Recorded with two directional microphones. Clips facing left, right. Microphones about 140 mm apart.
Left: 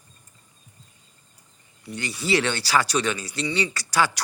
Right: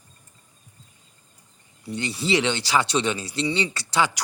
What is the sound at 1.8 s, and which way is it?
Speech, 30° right (ahead or behind).